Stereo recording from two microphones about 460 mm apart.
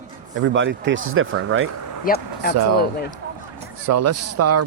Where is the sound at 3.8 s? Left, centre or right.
Right.